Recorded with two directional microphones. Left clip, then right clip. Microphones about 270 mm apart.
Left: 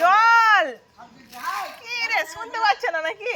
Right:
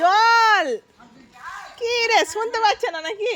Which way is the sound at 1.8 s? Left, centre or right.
Right.